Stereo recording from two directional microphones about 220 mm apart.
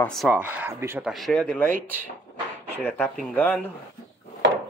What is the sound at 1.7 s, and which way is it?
Speech, 40° right (ahead or behind).